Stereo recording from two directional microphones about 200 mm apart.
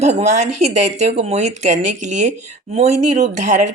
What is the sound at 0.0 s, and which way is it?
Speech, 35° right (ahead or behind).